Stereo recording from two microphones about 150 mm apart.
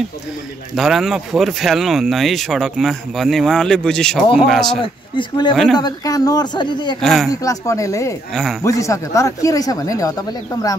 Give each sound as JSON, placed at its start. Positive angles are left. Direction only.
{"t": 0.7, "sound": "speech", "side_deg": 0}
{"t": 4.6, "sound": "speech", "side_deg": 30}
{"t": 5.5, "sound": "speech", "side_deg": 0}
{"t": 5.8, "sound": "speech", "side_deg": 25}
{"t": 7.0, "sound": "speech", "side_deg": 0}
{"t": 7.2, "sound": "speech", "side_deg": 20}
{"t": 8.3, "sound": "speech", "side_deg": 0}
{"t": 8.6, "sound": "speech", "side_deg": 20}